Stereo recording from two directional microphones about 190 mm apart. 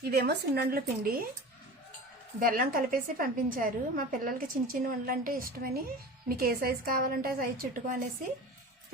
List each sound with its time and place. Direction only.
0.0 s a woman's voice: 55° right (ahead or behind)
2.4 s a woman's voice: 50° right (ahead or behind)